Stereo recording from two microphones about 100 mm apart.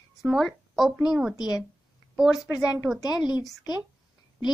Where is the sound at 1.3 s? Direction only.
40° left (ahead or behind).